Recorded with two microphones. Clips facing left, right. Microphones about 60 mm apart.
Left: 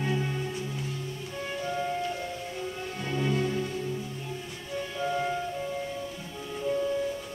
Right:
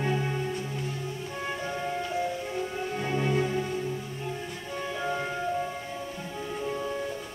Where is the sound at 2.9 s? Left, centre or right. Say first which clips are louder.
Right 2 dB; centre.